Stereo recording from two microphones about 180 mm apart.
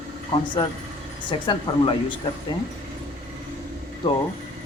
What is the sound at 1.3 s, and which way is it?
Speech, 25° left (ahead or behind).